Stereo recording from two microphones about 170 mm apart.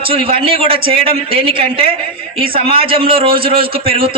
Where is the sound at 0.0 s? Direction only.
35° right (ahead or behind).